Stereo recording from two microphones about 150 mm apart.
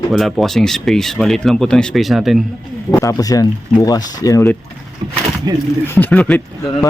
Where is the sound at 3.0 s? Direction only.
25° left (ahead or behind).